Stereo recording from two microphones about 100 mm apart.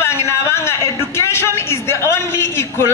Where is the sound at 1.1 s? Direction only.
25° left (ahead or behind).